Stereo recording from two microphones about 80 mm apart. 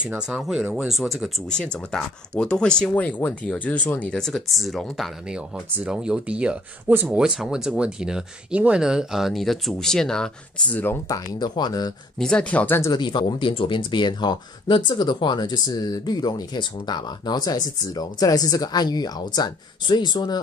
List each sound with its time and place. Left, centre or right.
0.3 s speech: centre
1.5 s speech: centre
2.9 s speech: left
4.2 s speech: centre
5.3 s speech: centre
6.9 s speech: right
7.2 s speech: centre
10.7 s speech: left
11.1 s speech: left
12.2 s speech: centre
12.9 s speech: left